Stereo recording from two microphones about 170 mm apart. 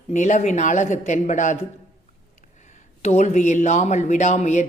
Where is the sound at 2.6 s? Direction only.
45° left (ahead or behind).